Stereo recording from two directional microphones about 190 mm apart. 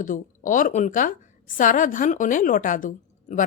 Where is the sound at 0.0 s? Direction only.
45° left (ahead or behind).